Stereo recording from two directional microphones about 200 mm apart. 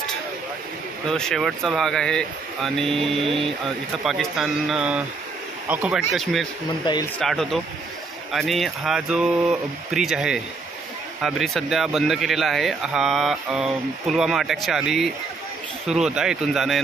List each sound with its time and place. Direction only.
1.0 s speech: 5° left (ahead or behind)
6.8 s speech: 20° left (ahead or behind)
7.2 s speech: centre (ahead or behind)